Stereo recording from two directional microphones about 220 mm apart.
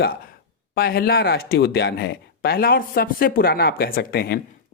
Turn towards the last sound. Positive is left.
turn(degrees=45)  # may be behind; listen again after turning